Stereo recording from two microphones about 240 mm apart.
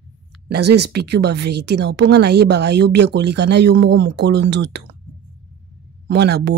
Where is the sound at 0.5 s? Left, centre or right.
Right.